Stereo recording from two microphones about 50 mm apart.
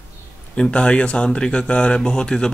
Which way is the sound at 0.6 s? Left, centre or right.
Left.